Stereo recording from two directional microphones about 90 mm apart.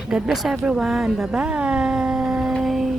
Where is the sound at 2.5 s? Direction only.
Centre (ahead or behind).